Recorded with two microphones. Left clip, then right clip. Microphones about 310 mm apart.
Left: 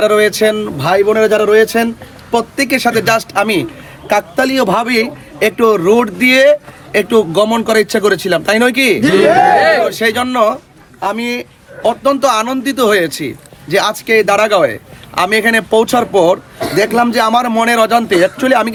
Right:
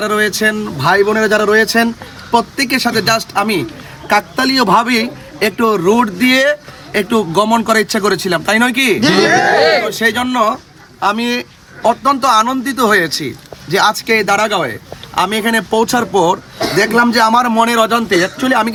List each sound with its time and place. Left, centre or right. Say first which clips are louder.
0.0 s a man's voice: left 4 dB; centre
9.6 s a sound: left 1 dB; left
9.8 s a man's voice: left 1 dB; centre
11.8 s a man's voice: even; centre